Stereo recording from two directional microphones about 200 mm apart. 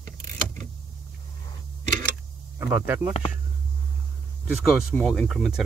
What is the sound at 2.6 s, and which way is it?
Speech, 10° right (ahead or behind).